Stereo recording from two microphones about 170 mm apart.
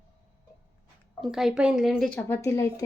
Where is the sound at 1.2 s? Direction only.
Centre (ahead or behind).